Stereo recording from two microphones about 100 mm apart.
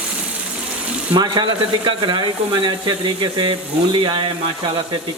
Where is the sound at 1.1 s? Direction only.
50° right (ahead or behind).